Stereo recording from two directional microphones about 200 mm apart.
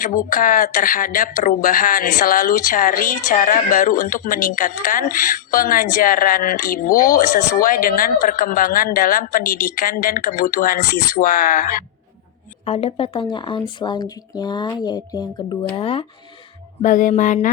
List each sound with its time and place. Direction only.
0.0 s speech: 45° left (ahead or behind)
12.6 s speech: 30° left (ahead or behind)
16.8 s music: 40° left (ahead or behind)